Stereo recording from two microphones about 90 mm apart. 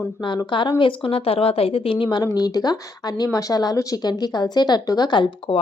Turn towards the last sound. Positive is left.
turn(degrees=70)  # may be behind; listen again after turning